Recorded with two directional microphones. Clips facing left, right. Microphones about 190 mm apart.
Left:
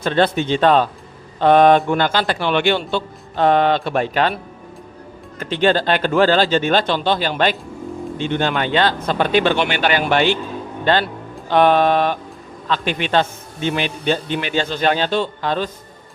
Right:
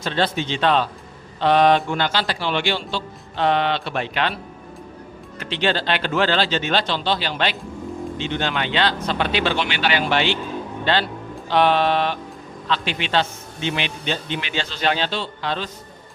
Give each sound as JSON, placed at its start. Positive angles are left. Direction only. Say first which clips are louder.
{"t": 0.0, "sound": "a man's voice", "louder": "left 5 dB", "side_deg": 55}
{"t": 5.4, "sound": "a man's voice", "louder": "left 6 dB", "side_deg": 45}